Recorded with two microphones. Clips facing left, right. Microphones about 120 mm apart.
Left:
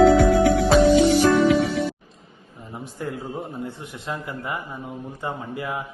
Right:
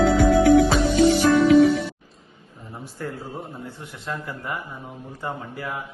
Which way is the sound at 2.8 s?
20° left (ahead or behind).